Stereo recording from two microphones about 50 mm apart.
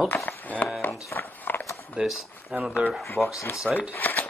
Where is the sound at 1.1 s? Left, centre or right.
Left.